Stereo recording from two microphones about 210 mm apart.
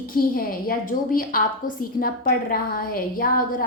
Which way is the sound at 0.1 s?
45° left (ahead or behind).